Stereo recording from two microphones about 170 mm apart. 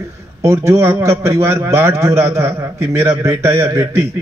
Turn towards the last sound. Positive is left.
turn(degrees=-15)  # may be behind; listen again after turning